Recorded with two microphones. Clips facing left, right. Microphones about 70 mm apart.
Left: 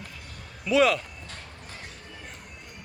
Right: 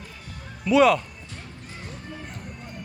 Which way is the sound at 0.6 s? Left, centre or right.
Centre.